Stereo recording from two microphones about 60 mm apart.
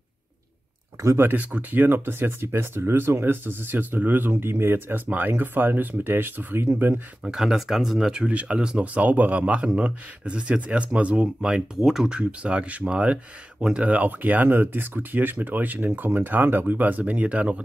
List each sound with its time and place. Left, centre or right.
1.2 s speech: right
7.2 s speech: centre
11.4 s speech: centre